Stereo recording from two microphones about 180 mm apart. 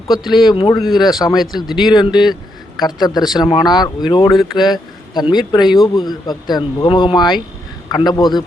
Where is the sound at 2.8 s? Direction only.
20° left (ahead or behind).